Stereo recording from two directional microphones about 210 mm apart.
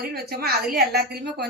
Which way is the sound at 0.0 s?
50° right (ahead or behind).